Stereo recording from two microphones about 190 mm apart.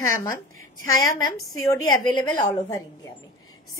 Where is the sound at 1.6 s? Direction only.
20° left (ahead or behind).